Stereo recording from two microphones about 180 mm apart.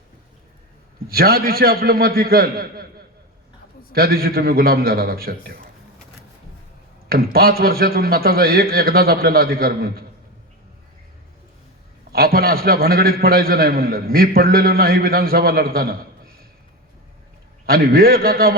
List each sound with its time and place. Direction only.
1.0 s a man's voice: 60° right (ahead or behind)
3.9 s a man's voice: 60° right (ahead or behind)
7.1 s a man's voice: 55° right (ahead or behind)
12.1 s a man's voice: 60° right (ahead or behind)
17.7 s a man's voice: 55° right (ahead or behind)